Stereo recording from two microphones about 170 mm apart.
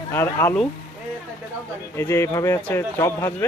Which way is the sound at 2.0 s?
15° left (ahead or behind).